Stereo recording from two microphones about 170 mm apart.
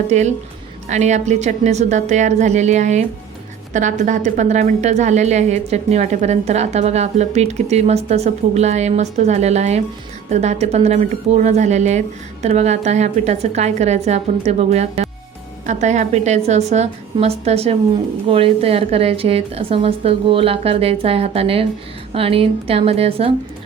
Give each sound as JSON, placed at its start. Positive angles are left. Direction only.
{"t": 0.1, "sound": "a woman's voice", "side_deg": -40}